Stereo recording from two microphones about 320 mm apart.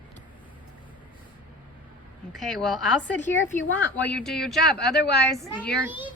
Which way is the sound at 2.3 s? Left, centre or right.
Centre.